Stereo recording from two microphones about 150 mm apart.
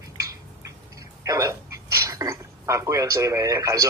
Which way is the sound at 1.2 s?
20° right (ahead or behind).